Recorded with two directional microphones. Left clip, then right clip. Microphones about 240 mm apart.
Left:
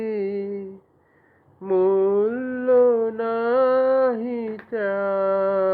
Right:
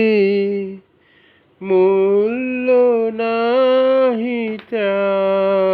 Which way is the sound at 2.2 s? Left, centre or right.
Right.